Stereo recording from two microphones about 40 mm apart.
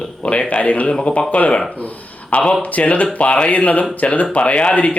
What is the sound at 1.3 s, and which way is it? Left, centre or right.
Speech, left.